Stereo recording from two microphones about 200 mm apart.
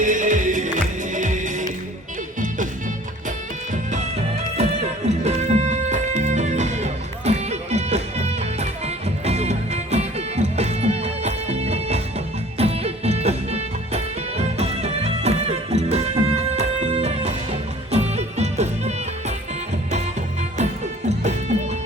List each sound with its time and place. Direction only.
0.0 s music: 40° right (ahead or behind)
3.2 s music: 40° right (ahead or behind)
20.6 s music: 35° right (ahead or behind)